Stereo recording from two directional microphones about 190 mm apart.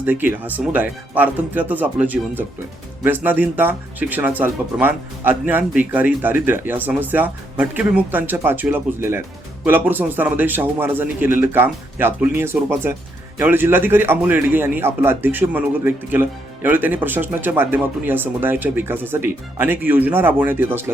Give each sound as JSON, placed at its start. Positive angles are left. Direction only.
{"t": 0.0, "sound": "speech", "side_deg": -10}